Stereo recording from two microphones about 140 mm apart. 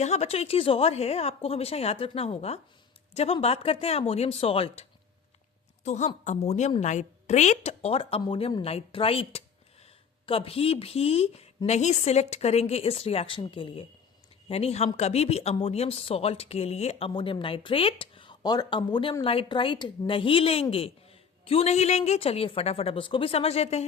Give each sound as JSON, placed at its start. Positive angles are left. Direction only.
{"t": 0.0, "sound": "a woman's voice", "side_deg": 50}